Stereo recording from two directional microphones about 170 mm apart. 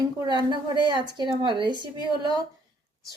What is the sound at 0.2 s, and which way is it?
Speech, 25° right (ahead or behind).